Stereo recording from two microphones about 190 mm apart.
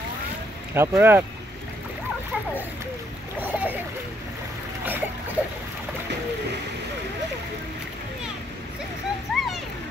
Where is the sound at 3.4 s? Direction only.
10° right (ahead or behind).